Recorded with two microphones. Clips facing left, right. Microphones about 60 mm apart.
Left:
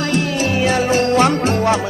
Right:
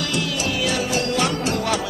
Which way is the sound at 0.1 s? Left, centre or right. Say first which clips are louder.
Left 6 dB; left.